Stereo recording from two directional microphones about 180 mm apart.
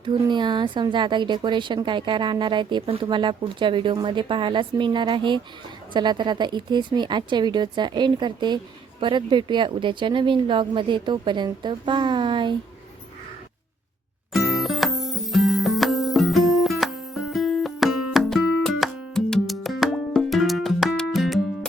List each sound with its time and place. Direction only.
0.0 s speech: 25° right (ahead or behind)
14.3 s music: centre (ahead or behind)